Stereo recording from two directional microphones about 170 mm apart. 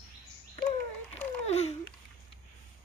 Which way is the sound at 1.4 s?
40° left (ahead or behind).